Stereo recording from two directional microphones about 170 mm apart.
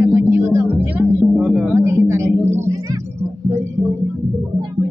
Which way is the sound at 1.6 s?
15° right (ahead or behind).